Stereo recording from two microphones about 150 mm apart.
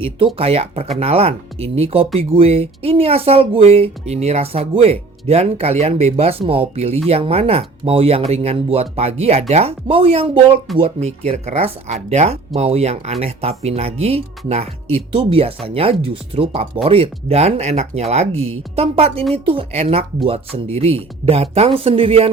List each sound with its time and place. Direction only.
0.3 s speech: 40° right (ahead or behind)